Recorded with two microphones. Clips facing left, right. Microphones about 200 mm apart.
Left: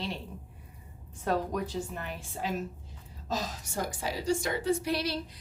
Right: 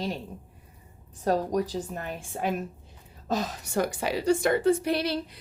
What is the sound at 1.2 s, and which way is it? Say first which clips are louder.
A woman's voice: right 5 dB; 35° right (ahead or behind).